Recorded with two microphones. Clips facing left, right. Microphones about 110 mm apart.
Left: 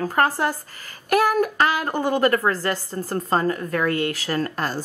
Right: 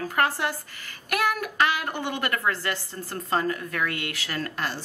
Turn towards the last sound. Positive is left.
turn(degrees=40)  # may be behind; listen again after turning